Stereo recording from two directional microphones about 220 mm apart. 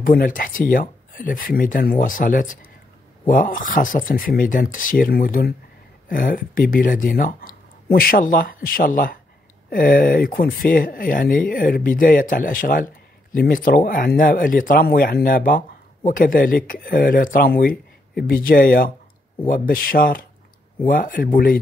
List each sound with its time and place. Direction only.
0.0 s speech: 40° left (ahead or behind)